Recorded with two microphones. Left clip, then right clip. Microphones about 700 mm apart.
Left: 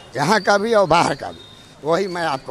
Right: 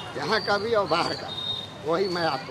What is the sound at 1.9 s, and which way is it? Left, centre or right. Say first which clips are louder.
Speech: left 5 dB; left.